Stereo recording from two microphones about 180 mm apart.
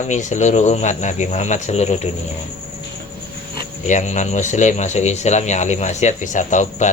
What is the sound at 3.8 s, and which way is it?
Speech, 40° left (ahead or behind).